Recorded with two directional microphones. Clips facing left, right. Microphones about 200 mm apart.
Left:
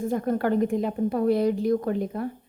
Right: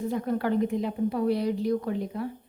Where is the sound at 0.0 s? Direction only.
50° left (ahead or behind).